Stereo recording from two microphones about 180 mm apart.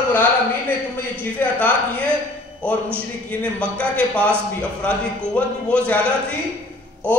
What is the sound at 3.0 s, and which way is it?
A man's voice, 5° left (ahead or behind).